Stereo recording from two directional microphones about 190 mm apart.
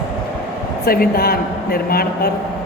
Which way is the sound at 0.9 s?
50° left (ahead or behind).